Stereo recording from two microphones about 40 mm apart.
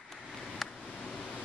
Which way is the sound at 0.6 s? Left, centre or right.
Centre.